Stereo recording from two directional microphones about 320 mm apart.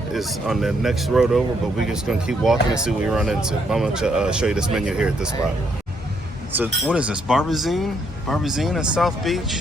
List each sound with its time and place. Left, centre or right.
0.1 s speech: centre
6.6 s speech: centre